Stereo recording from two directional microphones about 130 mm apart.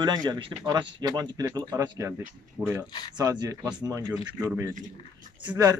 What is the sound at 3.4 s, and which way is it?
A man's voice, 30° right (ahead or behind).